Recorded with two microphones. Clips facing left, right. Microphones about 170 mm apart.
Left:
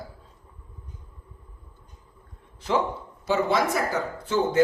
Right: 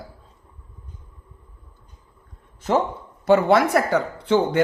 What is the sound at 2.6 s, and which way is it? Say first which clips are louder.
Speech: right 4 dB; 45° right (ahead or behind).